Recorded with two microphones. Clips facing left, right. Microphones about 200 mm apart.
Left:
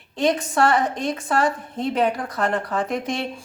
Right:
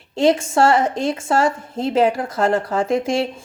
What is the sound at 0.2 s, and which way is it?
A woman's voice, 25° right (ahead or behind).